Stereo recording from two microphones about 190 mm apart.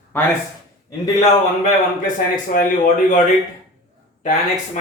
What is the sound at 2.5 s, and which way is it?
Speech, 50° left (ahead or behind).